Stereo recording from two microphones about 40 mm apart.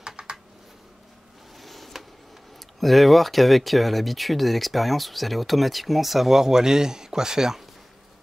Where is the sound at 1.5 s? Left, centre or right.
Centre.